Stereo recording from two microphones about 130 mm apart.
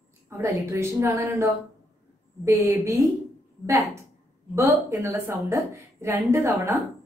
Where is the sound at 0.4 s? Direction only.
20° right (ahead or behind).